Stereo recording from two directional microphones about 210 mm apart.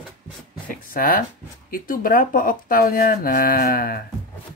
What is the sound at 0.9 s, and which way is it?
Speech, 40° left (ahead or behind).